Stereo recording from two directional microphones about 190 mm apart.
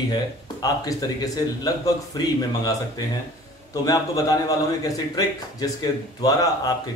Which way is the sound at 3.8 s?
20° left (ahead or behind).